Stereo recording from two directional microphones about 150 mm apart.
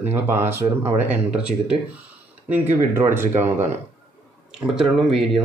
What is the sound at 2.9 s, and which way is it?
Speech, 15° right (ahead or behind).